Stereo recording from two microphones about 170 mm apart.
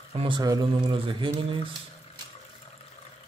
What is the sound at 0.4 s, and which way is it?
Speech, 25° right (ahead or behind).